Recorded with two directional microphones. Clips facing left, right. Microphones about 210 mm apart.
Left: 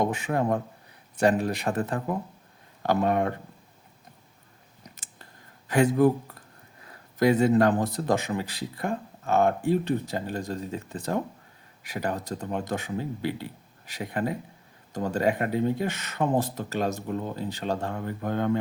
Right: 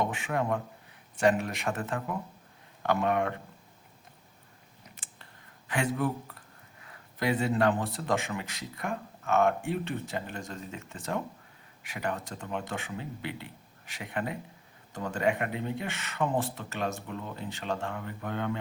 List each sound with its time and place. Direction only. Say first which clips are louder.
0.0 s a man's voice: left 5 dB; 40° left (ahead or behind)
4.9 s a sound: left 3 dB; 40° left (ahead or behind)
6.8 s a man's voice: left 8 dB; 45° left (ahead or behind)